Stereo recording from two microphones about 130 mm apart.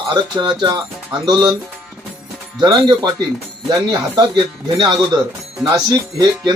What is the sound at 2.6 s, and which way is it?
Speech, 35° right (ahead or behind).